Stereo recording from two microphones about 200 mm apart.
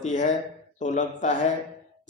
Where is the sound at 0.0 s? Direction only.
40° left (ahead or behind).